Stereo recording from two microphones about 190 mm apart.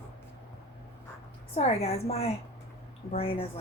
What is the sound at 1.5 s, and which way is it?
A woman's voice, 35° left (ahead or behind).